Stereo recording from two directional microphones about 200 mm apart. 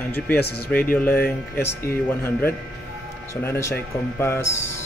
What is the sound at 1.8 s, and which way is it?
Speech, 10° left (ahead or behind).